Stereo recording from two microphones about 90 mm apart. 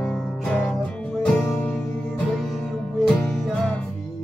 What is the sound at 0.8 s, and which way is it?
Music, 15° left (ahead or behind).